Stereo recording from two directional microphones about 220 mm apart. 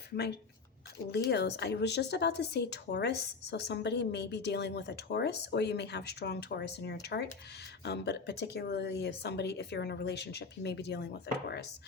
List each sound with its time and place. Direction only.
1.3 s speech: 50° left (ahead or behind)